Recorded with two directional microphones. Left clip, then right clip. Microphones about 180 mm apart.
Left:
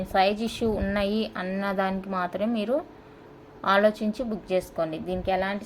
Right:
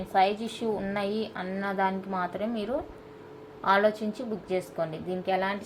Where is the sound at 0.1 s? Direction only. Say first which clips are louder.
Left 1 dB; 50° left (ahead or behind).